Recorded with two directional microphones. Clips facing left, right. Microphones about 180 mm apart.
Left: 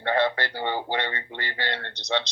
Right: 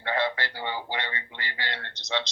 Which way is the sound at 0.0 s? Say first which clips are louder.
Left 4 dB; 50° left (ahead or behind).